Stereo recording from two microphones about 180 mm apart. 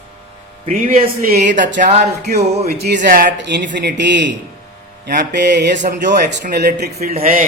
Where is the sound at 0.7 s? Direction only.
45° right (ahead or behind); by 1.8 s 80° right.